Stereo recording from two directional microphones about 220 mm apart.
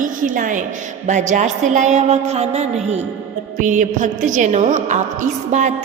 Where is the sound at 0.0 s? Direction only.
35° right (ahead or behind).